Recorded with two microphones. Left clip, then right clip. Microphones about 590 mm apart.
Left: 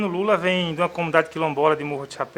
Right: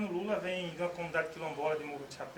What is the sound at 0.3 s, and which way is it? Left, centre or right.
Speech, left.